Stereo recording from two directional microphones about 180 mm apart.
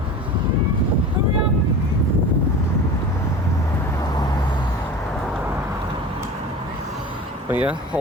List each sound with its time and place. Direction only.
7.5 s speech: 10° right (ahead or behind)